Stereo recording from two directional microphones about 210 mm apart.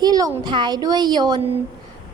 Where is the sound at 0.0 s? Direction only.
15° right (ahead or behind).